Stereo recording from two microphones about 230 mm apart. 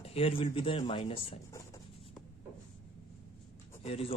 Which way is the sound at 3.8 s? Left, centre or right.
Left.